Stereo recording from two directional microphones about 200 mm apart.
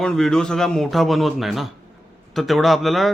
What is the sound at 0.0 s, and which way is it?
Speech, 5° left (ahead or behind).